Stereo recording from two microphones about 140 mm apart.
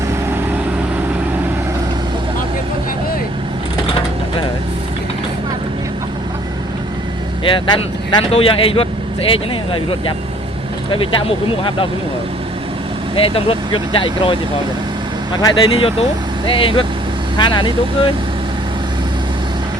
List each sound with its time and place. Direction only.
7.4 s speech: 40° left (ahead or behind)
13.1 s speech: 40° left (ahead or behind)
15.4 s speech: 30° left (ahead or behind)